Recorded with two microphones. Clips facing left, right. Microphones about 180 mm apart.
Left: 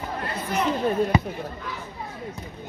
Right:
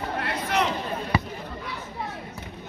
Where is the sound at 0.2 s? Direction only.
70° right (ahead or behind).